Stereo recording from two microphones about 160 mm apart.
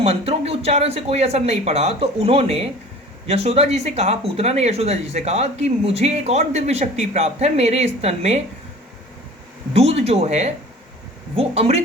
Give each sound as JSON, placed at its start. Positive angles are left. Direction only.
{"t": 0.0, "sound": "speech", "side_deg": -40}
{"t": 9.7, "sound": "speech", "side_deg": -40}